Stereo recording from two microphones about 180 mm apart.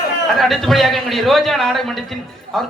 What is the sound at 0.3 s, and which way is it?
A man's voice, centre (ahead or behind).